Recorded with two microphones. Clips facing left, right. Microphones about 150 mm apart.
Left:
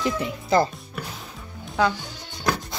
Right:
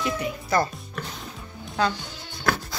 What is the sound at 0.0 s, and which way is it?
Speech, 25° left (ahead or behind).